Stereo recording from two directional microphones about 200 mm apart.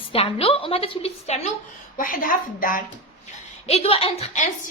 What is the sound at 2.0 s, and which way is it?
Speech, 45° left (ahead or behind).